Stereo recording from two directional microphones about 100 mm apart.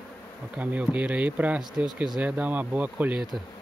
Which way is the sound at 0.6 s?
15° right (ahead or behind).